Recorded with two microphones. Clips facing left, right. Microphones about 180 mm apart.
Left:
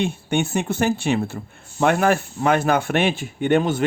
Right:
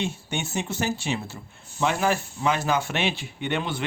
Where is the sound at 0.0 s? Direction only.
55° left (ahead or behind).